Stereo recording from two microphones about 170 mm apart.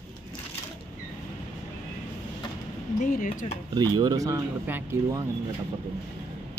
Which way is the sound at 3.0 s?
50° left (ahead or behind).